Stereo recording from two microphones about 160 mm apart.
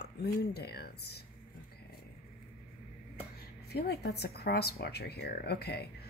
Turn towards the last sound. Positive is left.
turn(degrees=90)